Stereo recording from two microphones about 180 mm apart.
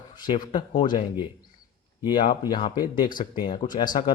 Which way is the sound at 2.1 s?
25° left (ahead or behind).